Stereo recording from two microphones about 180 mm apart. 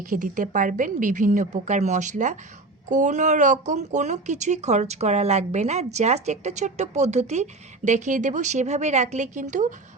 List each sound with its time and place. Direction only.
0.1 s a woman's voice: 45° right (ahead or behind)